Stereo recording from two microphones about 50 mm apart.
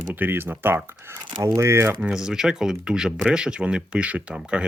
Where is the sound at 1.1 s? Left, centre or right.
Right.